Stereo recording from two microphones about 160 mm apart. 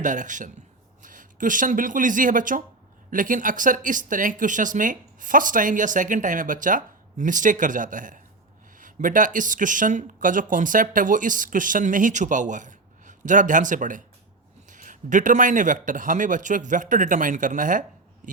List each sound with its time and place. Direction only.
0.0 s a man's voice: 55° right (ahead or behind)